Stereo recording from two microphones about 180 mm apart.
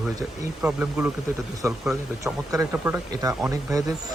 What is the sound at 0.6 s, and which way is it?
Speech, 10° right (ahead or behind).